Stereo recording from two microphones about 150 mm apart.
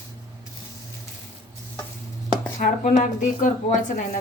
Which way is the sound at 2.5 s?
60° left (ahead or behind).